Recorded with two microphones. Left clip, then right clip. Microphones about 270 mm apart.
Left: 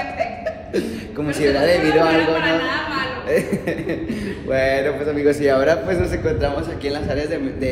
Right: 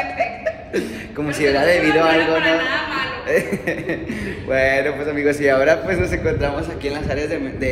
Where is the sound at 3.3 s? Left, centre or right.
Centre.